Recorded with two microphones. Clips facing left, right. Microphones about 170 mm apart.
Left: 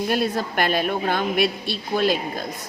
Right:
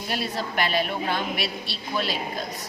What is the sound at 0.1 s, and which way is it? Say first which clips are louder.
A woman's voice: left 6 dB; 50° left (ahead or behind).